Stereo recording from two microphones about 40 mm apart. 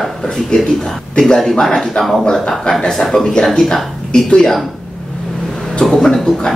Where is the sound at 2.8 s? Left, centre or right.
Centre.